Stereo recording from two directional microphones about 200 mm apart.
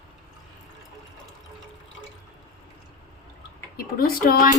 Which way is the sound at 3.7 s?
45° left (ahead or behind).